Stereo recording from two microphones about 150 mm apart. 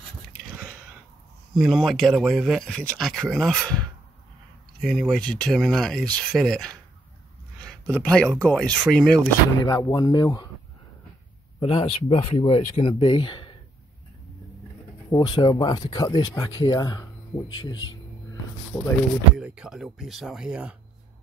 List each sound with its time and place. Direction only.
1.5 s speech: centre (ahead or behind)
4.8 s speech: centre (ahead or behind)
9.6 s speech: 20° left (ahead or behind)
11.6 s speech: 40° left (ahead or behind)
15.0 s speech: 30° left (ahead or behind)
19.3 s speech: 5° right (ahead or behind)